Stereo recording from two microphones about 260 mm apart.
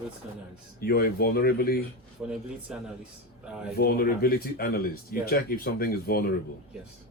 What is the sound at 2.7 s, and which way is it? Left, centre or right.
Speech, centre.